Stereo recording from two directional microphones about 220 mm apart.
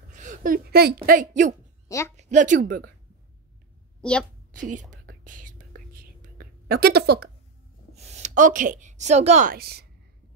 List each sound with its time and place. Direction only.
0.1 s speech: 35° right (ahead or behind)
1.9 s a woman's voice: 15° left (ahead or behind)
2.1 s speech: 35° right (ahead or behind)
4.0 s a woman's voice: 5° left (ahead or behind)
4.5 s speech: 35° right (ahead or behind)
4.9 s whispering: 35° right (ahead or behind)
6.2 s a sound: 40° right (ahead or behind)
7.9 s a woman's voice: 30° right (ahead or behind); by 9.8 s 45° right (ahead or behind)